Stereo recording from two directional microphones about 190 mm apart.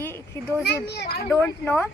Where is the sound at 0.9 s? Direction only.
60° left (ahead or behind).